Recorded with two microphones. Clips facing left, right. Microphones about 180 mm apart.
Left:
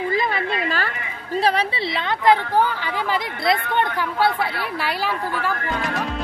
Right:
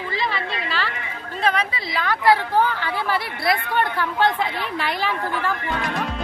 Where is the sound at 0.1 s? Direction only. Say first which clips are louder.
Left 4 dB; 50° left (ahead or behind).